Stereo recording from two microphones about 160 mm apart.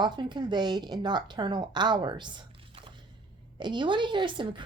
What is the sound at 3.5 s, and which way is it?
Speech, 30° right (ahead or behind).